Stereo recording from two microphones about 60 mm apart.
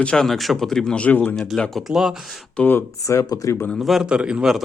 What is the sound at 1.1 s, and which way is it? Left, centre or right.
Speech, left.